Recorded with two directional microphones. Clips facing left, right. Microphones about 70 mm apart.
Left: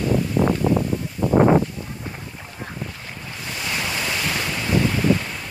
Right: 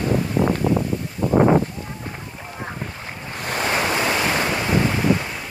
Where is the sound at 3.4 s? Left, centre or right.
Right.